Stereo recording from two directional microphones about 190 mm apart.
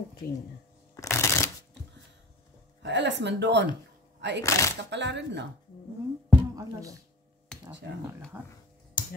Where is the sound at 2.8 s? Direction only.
65° right (ahead or behind).